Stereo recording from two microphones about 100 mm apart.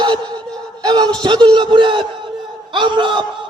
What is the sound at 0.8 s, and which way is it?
A man's voice, 45° right (ahead or behind).